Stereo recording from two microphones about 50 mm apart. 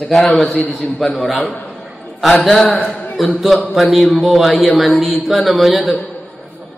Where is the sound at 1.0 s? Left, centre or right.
Left.